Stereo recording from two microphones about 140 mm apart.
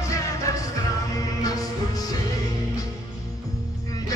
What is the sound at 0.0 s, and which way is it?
Music, 20° left (ahead or behind).